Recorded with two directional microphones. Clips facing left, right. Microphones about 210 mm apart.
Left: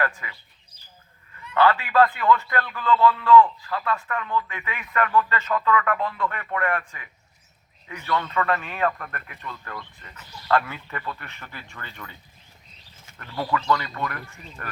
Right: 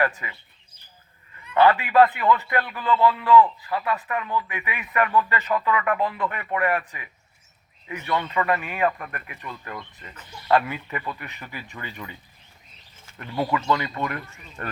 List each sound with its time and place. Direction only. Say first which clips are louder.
0.0 s speech: right 3 dB; 20° right (ahead or behind)
1.5 s a man's voice: right 2 dB; 20° right (ahead or behind)
13.1 s speech: right 2 dB; 20° right (ahead or behind)